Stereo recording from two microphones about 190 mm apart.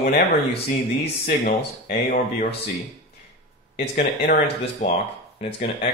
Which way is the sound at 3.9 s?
65° left (ahead or behind).